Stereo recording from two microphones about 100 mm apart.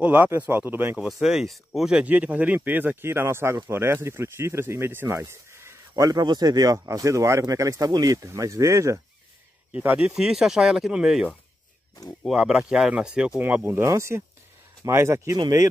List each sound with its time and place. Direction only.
0.0 s speech: 15° right (ahead or behind)
0.9 s speech: 5° right (ahead or behind); by 6.0 s 25° right (ahead or behind)
6.0 s speech: 40° right (ahead or behind)
9.7 s speech: 10° right (ahead or behind)
12.3 s speech: 5° right (ahead or behind); by 15.3 s 25° right (ahead or behind)